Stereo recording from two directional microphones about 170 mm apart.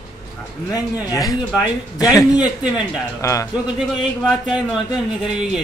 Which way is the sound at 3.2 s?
20° left (ahead or behind).